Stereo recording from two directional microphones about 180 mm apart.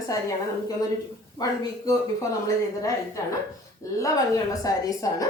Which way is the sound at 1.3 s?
20° left (ahead or behind).